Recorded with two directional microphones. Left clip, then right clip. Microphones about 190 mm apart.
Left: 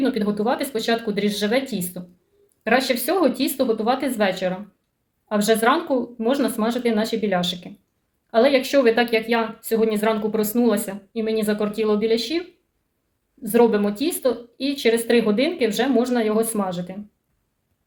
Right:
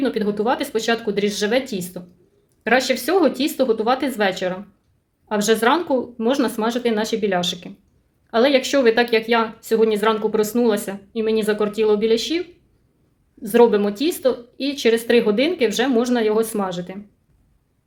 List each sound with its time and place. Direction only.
0.0 s speech: 40° right (ahead or behind)
13.5 s speech: 40° right (ahead or behind)